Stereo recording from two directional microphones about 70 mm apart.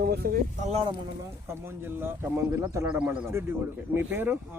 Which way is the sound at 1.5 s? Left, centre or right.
Right.